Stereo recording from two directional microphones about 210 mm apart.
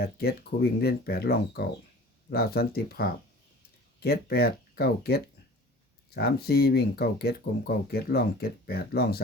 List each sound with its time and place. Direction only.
0.0 s speech: 45° left (ahead or behind)